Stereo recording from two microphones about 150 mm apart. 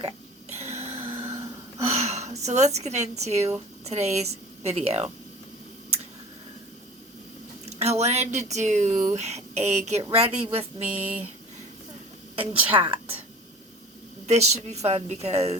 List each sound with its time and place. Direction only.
0.6 s a sound: 45° right (ahead or behind)
2.0 s speech: 45° right (ahead or behind)
7.7 s speech: 45° right (ahead or behind)
10.8 s speech: 10° right (ahead or behind)
12.4 s speech: 10° right (ahead or behind)
12.7 s a woman's voice: 35° right (ahead or behind)
14.3 s speech: 50° right (ahead or behind)